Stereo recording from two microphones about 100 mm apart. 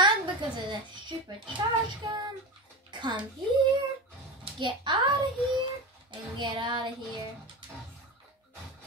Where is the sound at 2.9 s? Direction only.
50° right (ahead or behind).